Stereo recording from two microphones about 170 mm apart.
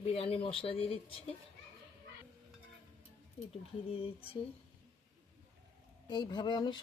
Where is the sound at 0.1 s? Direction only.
35° left (ahead or behind).